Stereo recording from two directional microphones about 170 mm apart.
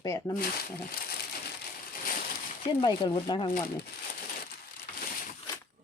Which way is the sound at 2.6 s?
30° left (ahead or behind).